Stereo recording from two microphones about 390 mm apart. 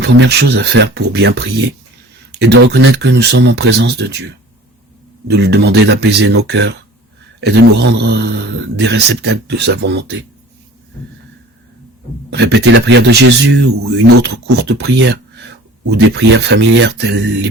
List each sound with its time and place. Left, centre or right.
0.0 s speech: right
5.3 s speech: right
12.3 s speech: right